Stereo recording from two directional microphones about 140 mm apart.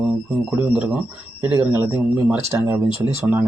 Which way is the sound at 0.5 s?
10° right (ahead or behind).